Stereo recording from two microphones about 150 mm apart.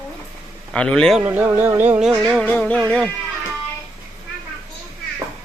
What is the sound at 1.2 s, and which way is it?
Music, 15° right (ahead or behind).